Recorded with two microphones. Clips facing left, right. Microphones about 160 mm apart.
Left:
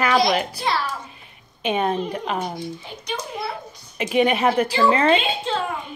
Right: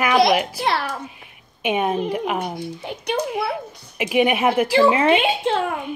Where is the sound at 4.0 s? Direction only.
10° right (ahead or behind).